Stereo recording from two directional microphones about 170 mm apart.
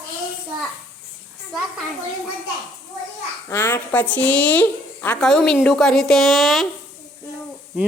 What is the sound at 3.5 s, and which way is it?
A woman's voice, 15° left (ahead or behind).